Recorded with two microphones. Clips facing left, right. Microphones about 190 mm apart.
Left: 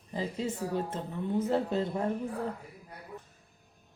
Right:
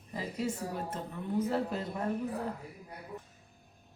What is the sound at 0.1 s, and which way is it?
A woman's voice, 25° left (ahead or behind).